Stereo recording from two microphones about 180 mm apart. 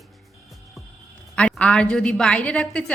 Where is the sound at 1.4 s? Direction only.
5° left (ahead or behind).